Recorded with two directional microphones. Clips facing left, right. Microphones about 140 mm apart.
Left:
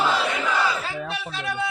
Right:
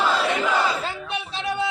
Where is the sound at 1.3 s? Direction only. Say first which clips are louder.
Right 5 dB; 25° right (ahead or behind).